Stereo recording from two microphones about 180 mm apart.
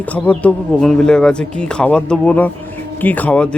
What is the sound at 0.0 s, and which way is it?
A man's voice, 10° left (ahead or behind).